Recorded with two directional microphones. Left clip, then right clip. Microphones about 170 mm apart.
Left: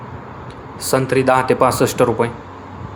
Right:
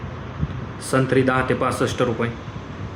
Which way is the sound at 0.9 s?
Centre (ahead or behind).